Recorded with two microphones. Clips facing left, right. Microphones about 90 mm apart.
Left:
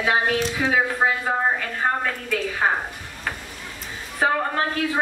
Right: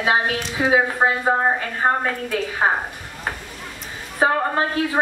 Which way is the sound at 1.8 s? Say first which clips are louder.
Right 4 dB; 35° right (ahead or behind).